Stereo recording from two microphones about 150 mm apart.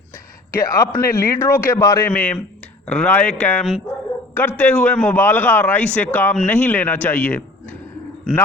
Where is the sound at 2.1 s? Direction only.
5° left (ahead or behind).